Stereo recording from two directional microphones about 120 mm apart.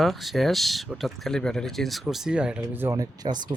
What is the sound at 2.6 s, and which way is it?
Speech, 20° right (ahead or behind).